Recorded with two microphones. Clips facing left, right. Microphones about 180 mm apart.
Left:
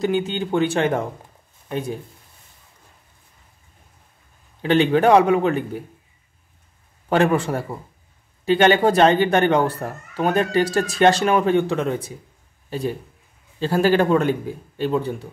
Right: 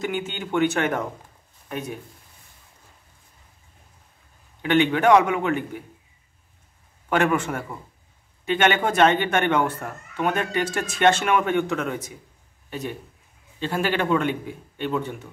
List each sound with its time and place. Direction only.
0.0 s speech: 35° left (ahead or behind)
4.6 s speech: 35° left (ahead or behind)
7.1 s speech: 35° left (ahead or behind)